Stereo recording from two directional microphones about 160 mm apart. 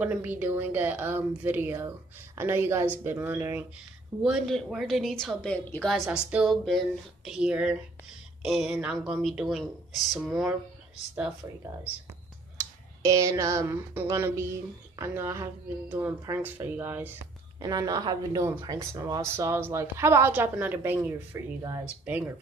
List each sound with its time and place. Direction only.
0.0 s a woman's voice: 10° right (ahead or behind)
4.2 s speech: centre (ahead or behind)
6.0 s speech: 5° right (ahead or behind)
12.5 s a woman's voice: 20° right (ahead or behind)
17.6 s a woman's voice: 25° right (ahead or behind)